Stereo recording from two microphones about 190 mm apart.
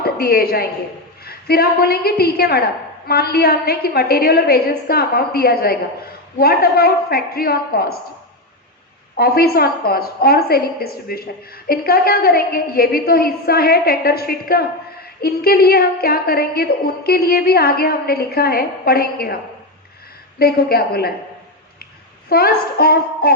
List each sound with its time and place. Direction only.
0.0 s a woman's voice: 55° left (ahead or behind)
9.1 s a woman's voice: 55° left (ahead or behind)
20.4 s a woman's voice: 55° left (ahead or behind)
22.3 s a woman's voice: 55° left (ahead or behind)